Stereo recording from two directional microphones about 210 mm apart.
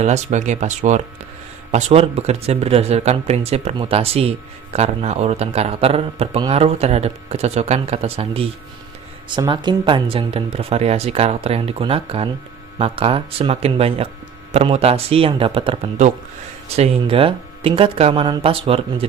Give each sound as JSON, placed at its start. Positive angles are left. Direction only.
{"t": 0.0, "sound": "speech", "side_deg": -35}